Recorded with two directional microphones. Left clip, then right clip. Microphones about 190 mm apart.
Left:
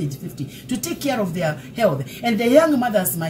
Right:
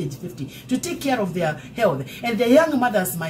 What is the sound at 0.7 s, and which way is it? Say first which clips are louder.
Speech: right 1 dB; 15° right (ahead or behind).